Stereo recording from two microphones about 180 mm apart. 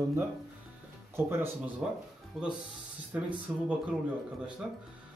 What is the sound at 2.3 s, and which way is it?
A man's voice, centre (ahead or behind).